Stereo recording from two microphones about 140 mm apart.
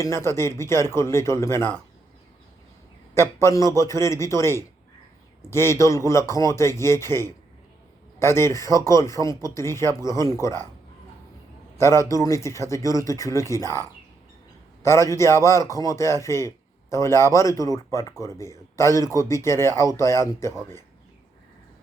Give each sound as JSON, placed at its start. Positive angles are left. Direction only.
{"t": 0.0, "sound": "speech", "side_deg": 20}
{"t": 3.2, "sound": "speech", "side_deg": 20}
{"t": 11.8, "sound": "speech", "side_deg": 20}
{"t": 14.8, "sound": "speech", "side_deg": 20}